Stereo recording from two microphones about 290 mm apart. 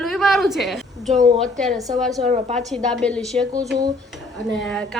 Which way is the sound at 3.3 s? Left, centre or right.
Centre.